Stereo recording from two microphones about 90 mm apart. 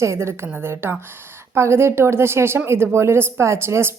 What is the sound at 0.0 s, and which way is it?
A woman's voice, 30° right (ahead or behind).